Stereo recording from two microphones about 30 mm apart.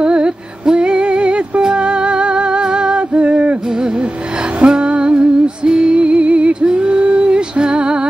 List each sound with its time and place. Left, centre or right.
0.0 s music: right
3.3 s music: right
4.6 s music: right